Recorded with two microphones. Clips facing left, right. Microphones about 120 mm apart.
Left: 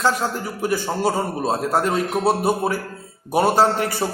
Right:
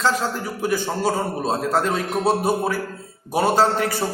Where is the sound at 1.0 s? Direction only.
15° left (ahead or behind).